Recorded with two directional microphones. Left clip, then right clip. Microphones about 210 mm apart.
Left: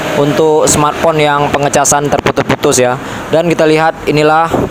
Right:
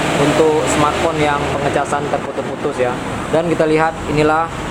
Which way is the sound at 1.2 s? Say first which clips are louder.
Left 6 dB; 45° left (ahead or behind).